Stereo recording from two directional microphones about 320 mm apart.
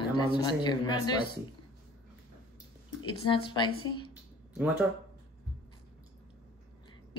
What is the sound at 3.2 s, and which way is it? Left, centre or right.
Speech, centre.